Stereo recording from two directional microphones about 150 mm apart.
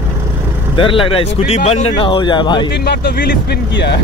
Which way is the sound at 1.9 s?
30° left (ahead or behind).